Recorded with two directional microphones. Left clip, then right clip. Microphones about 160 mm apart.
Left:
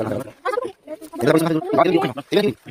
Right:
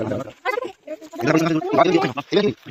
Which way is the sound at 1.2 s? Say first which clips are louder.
Left 2 dB; 30° left (ahead or behind).